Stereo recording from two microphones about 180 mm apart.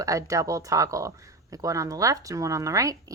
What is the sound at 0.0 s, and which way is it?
Speech, 20° right (ahead or behind).